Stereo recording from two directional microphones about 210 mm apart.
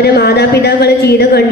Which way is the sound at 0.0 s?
50° left (ahead or behind).